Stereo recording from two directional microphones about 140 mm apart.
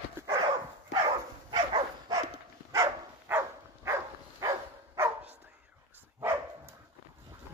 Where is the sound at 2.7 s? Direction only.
20° right (ahead or behind).